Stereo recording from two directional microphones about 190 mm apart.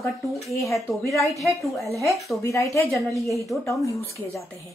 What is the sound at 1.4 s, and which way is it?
Speech, centre (ahead or behind).